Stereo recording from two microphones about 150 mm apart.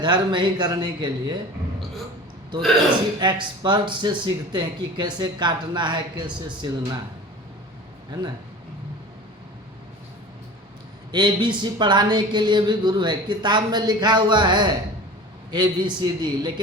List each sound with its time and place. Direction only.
0.0 s speech: 30° right (ahead or behind)
3.2 s speech: 30° right (ahead or behind)
11.1 s speech: 30° right (ahead or behind)